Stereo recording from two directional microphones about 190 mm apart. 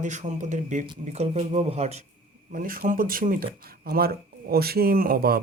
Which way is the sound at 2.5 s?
45° right (ahead or behind).